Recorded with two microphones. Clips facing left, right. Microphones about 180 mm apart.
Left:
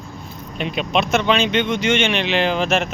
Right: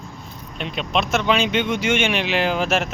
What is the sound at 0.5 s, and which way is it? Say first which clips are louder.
Speech: left 3 dB; 5° left (ahead or behind).